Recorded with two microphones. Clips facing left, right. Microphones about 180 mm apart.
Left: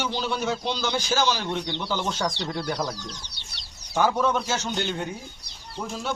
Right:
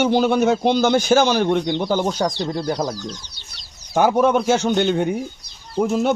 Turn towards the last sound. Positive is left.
turn(degrees=-60)  # may be behind; listen again after turning